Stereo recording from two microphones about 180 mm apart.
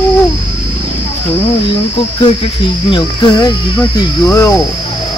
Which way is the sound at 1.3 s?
35° left (ahead or behind).